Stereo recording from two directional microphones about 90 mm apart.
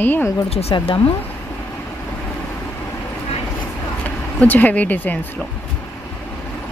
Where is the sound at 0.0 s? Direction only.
20° left (ahead or behind).